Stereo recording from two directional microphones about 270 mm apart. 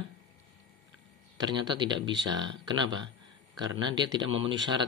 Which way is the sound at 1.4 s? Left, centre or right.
Centre.